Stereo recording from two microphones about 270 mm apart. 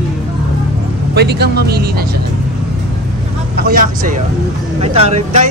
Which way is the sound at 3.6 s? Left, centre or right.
Right.